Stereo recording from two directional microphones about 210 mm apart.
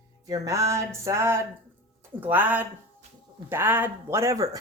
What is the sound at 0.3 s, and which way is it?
Music, 15° right (ahead or behind).